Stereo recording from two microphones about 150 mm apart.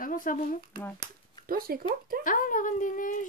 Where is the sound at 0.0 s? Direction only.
65° left (ahead or behind).